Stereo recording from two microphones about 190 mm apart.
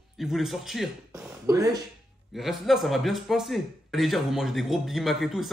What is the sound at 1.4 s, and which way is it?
Speech, 15° right (ahead or behind).